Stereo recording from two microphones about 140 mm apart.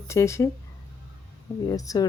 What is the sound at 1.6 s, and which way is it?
Speech, 25° left (ahead or behind).